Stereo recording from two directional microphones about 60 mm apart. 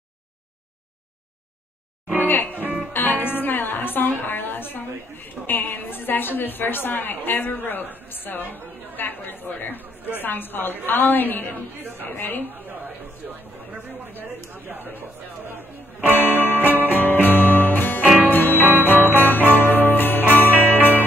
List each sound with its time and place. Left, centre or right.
2.1 s music: left
5.5 s a woman's voice: left
11.5 s speech: right
12.0 s a woman's voice: left
12.4 s speech: right
14.5 s chatter: right
16.0 s music: left